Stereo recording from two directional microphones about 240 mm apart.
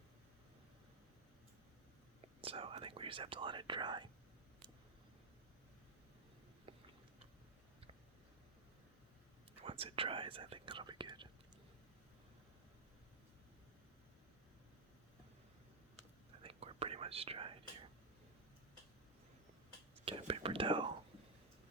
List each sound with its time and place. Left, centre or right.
2.2 s speech: right
6.7 s a sound: right
9.6 s whispering: right
16.4 s whispering: right
20.1 s whispering: right